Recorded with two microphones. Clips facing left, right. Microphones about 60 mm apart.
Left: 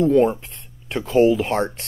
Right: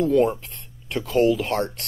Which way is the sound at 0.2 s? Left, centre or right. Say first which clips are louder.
Left 2 dB; centre.